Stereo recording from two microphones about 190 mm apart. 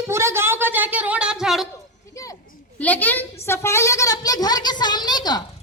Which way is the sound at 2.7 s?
10° left (ahead or behind).